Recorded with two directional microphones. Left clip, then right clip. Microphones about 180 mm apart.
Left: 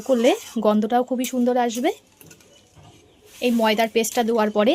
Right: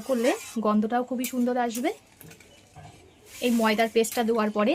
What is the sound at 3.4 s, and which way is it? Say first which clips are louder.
Speech: left 4 dB; 35° left (ahead or behind).